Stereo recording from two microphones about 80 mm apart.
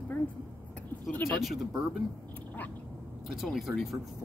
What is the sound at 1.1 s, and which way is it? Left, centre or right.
Speech, left.